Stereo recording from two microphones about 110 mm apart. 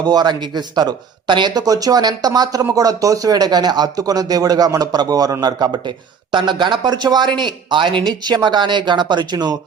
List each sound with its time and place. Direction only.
0.0 s speech: 40° right (ahead or behind)